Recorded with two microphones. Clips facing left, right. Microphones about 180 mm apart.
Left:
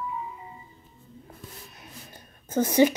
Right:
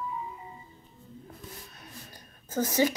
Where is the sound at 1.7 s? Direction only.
20° left (ahead or behind).